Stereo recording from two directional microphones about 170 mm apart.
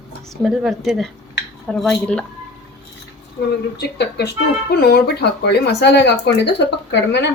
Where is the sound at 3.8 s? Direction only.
80° left.